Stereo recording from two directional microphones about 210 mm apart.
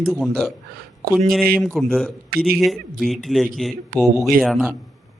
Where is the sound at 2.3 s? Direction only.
45° right (ahead or behind).